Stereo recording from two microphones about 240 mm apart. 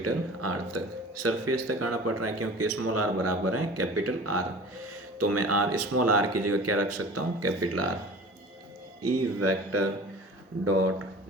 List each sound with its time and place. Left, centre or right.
0.0 s speech: right
9.0 s speech: right